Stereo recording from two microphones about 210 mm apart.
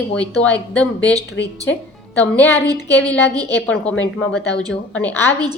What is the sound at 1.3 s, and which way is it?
Speech, 60° left (ahead or behind).